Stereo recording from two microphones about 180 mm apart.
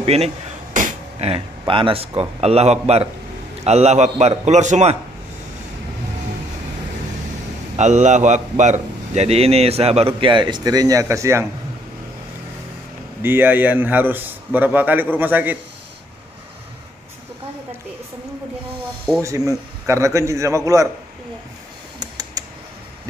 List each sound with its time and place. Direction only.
0.0 s a man's voice: 35° right (ahead or behind)
7.7 s a man's voice: 40° right (ahead or behind); by 11.4 s 15° right (ahead or behind)
13.2 s a man's voice: 10° right (ahead or behind)
19.2 s a man's voice: 15° right (ahead or behind)
22.0 s typing: 20° right (ahead or behind)